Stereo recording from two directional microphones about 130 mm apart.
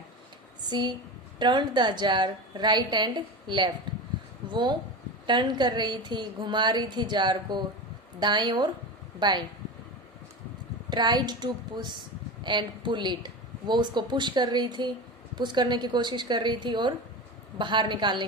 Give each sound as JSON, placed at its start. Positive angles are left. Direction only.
{"t": 0.6, "sound": "a woman's voice", "side_deg": -35}
{"t": 10.8, "sound": "a woman's voice", "side_deg": -35}